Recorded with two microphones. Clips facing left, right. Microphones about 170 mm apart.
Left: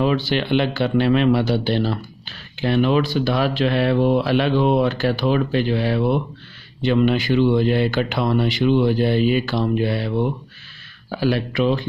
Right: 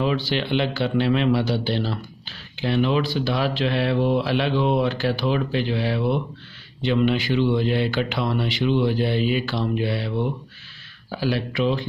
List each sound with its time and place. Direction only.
0.0 s speech: 50° left (ahead or behind)